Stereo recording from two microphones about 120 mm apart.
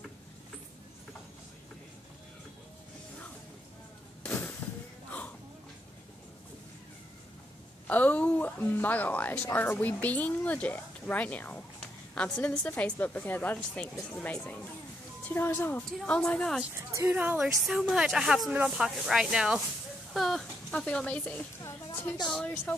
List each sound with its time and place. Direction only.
4.2 s a sound: 10° left (ahead or behind)
7.8 s a woman's voice: 15° left (ahead or behind)
16.0 s a woman's voice: centre (ahead or behind)
16.7 s speech: 25° right (ahead or behind)
17.1 s a woman's voice: 10° right (ahead or behind); by 22.8 s 10° left (ahead or behind)